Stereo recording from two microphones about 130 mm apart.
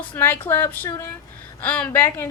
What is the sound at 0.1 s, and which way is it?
Speech, 15° left (ahead or behind).